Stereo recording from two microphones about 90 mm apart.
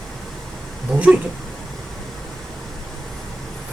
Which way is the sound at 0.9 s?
15° right (ahead or behind).